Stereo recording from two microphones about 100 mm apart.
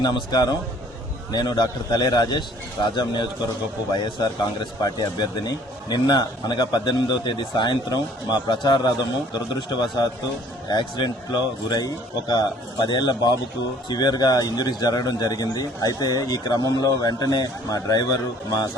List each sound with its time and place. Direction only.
0.0 s a man's voice: 40° left (ahead or behind)